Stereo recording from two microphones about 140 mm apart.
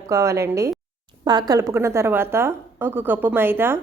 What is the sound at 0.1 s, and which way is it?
A woman's voice, 20° right (ahead or behind).